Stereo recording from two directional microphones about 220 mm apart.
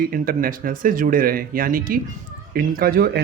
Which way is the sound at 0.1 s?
40° right (ahead or behind).